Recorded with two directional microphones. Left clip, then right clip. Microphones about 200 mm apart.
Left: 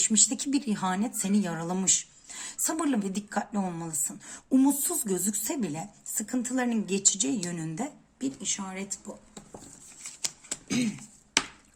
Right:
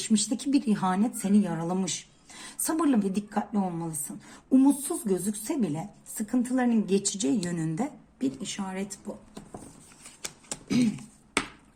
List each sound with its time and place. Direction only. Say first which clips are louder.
0.0 s a woman's voice: left 2 dB; 15° left (ahead or behind)
6.9 s a woman's voice: right 1 dB; centre (ahead or behind)
7.4 s a woman's voice: right 3 dB; 15° left (ahead or behind)
10.2 s typewriter: left 1 dB; 10° left (ahead or behind)